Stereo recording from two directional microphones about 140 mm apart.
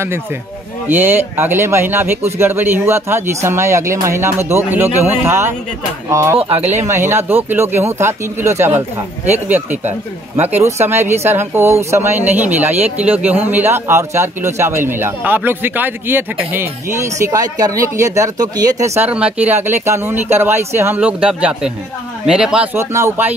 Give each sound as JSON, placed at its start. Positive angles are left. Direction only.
{"t": 0.8, "sound": "a man's voice", "side_deg": -15}
{"t": 6.3, "sound": "speech", "side_deg": -45}
{"t": 6.8, "sound": "a man's voice", "side_deg": -20}
{"t": 19.0, "sound": "a man's voice", "side_deg": -10}
{"t": 22.8, "sound": "a man's voice", "side_deg": -20}